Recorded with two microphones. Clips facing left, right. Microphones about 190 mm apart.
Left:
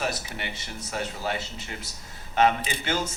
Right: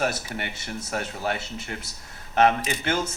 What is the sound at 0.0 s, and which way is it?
Speech, 55° right (ahead or behind).